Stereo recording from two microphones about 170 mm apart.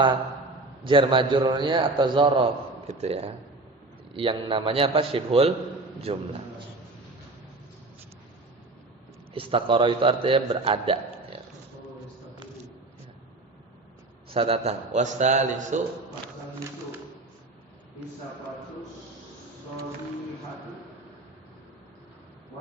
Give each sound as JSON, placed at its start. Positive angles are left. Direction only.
{"t": 0.9, "sound": "a man's voice", "side_deg": -30}
{"t": 9.3, "sound": "a man's voice", "side_deg": -30}
{"t": 14.3, "sound": "a man's voice", "side_deg": -35}